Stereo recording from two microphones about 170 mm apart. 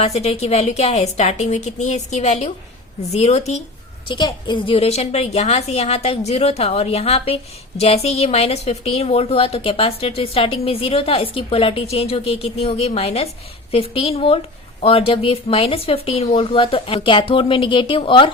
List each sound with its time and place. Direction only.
0.0 s a woman's voice: 35° left (ahead or behind)
4.1 s a woman's voice: 25° left (ahead or behind)